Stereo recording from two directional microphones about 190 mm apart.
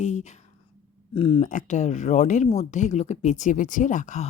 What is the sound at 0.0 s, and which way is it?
Speech, 40° left (ahead or behind).